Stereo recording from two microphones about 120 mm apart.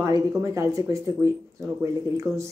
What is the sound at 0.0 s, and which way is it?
Speech, 25° right (ahead or behind).